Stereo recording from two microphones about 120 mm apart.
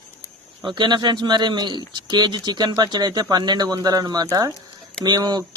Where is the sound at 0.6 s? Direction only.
40° right (ahead or behind).